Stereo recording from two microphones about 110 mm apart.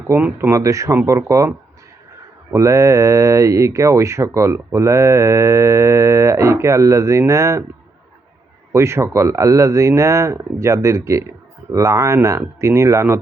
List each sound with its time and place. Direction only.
0.2 s speech: 15° right (ahead or behind)
8.7 s speech: 25° right (ahead or behind)